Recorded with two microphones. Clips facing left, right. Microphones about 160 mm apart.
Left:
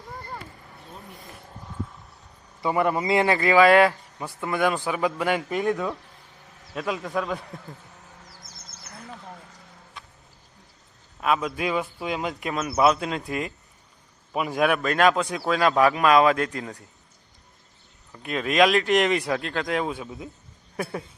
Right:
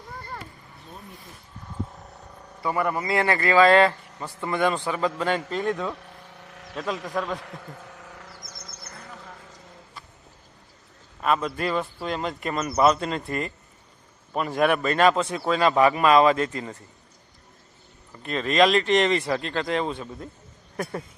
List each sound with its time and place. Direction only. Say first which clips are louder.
2.6 s a man's voice: left 3 dB; 20° left (ahead or behind)
6.3 s a sound: right 6 dB; 80° right
6.7 s a man's voice: left 1 dB; 5° left (ahead or behind)
7.9 s a sound: right 5 dB; 90° right
11.2 s a man's voice: even; 5° left (ahead or behind)
18.1 s a man's voice: even; 5° left (ahead or behind)